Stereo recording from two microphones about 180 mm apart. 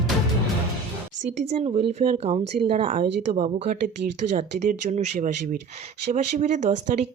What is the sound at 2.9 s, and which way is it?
Speech, 45° right (ahead or behind).